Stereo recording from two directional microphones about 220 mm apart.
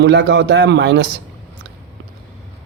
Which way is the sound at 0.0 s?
55° right (ahead or behind).